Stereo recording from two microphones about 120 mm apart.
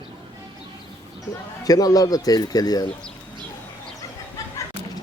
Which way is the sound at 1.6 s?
30° left (ahead or behind).